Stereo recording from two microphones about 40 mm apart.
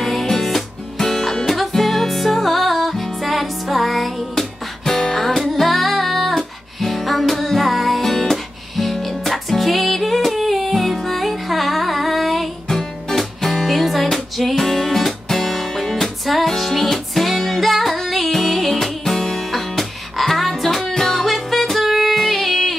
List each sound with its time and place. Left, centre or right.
0.0 s music: centre